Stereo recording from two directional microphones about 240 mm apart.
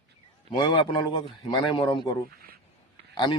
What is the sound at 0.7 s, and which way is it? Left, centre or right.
A man's voice, centre.